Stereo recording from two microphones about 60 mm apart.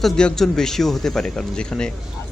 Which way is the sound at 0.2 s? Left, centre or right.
Centre.